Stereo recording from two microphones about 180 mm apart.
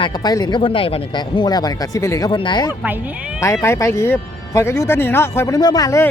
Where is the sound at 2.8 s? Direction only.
10° right (ahead or behind).